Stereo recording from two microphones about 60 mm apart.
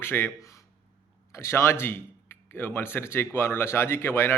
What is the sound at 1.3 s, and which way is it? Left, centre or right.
Speech, left.